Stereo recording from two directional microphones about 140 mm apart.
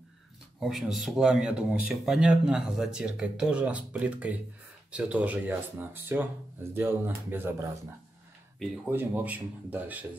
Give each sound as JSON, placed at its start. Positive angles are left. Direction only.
{"t": 0.6, "sound": "speech", "side_deg": -5}
{"t": 8.8, "sound": "speech", "side_deg": -10}